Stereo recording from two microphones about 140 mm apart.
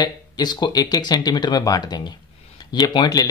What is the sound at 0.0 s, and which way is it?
Speech, 30° left (ahead or behind).